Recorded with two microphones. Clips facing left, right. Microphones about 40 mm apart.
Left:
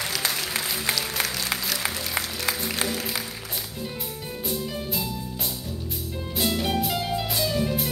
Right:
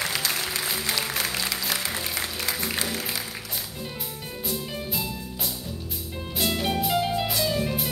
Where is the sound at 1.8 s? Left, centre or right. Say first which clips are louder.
Left 1 dB; left.